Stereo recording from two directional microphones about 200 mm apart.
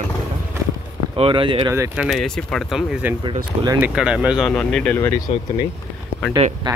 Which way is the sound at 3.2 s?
20° right (ahead or behind).